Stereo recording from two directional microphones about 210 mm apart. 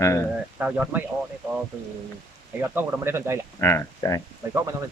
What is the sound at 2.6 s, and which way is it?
Speech, 10° right (ahead or behind).